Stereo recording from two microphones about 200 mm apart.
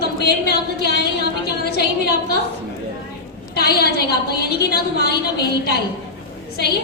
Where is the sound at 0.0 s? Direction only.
50° left (ahead or behind).